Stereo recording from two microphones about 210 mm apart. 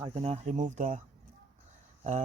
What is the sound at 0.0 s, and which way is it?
Speech, 30° right (ahead or behind).